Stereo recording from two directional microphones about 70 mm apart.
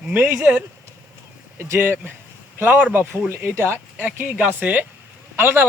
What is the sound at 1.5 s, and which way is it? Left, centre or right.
Speech, right.